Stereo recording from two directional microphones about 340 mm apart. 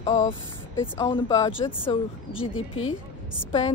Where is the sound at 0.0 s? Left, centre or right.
Centre.